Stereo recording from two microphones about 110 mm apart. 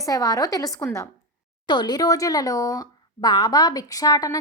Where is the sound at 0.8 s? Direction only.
20° left (ahead or behind).